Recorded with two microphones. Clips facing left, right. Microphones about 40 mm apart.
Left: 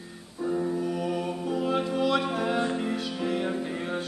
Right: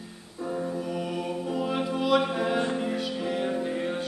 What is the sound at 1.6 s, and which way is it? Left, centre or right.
Music, centre.